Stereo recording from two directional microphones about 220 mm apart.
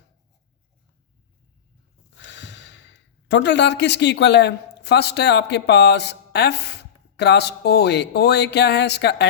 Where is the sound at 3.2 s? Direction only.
50° left (ahead or behind).